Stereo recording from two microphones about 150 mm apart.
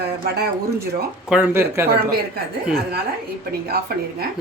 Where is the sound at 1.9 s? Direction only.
90° right.